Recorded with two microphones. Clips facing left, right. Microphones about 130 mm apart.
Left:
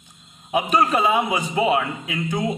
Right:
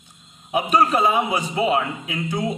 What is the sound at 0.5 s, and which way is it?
Speech, 10° right (ahead or behind).